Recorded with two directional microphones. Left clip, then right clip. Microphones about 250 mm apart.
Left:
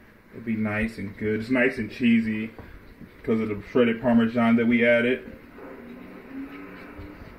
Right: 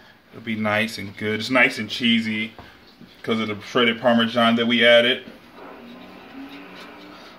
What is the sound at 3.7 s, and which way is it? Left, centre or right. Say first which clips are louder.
Speech: right 4 dB; right.